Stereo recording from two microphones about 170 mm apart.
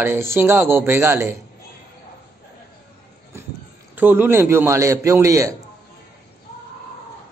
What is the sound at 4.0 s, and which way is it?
Speech, 10° right (ahead or behind).